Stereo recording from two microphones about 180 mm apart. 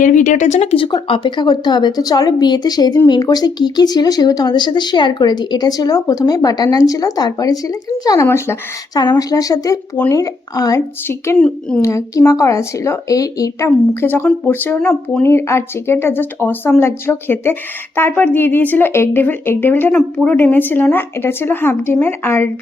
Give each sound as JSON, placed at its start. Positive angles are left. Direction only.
{"t": 0.0, "sound": "speech", "side_deg": 45}
{"t": 11.8, "sound": "speech", "side_deg": 20}